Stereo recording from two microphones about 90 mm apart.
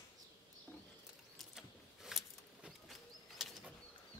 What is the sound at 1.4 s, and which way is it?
Bird, 5° right (ahead or behind).